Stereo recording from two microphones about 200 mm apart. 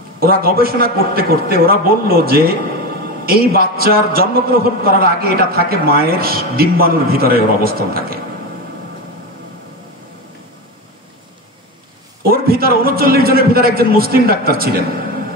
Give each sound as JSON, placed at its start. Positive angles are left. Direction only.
{"t": 0.2, "sound": "a man's voice", "side_deg": -50}
{"t": 12.2, "sound": "a man's voice", "side_deg": -50}